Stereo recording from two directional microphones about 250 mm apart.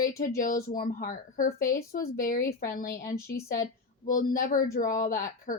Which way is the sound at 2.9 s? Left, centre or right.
Centre.